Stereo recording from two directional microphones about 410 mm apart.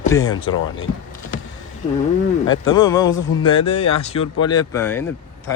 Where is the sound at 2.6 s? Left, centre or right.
Centre.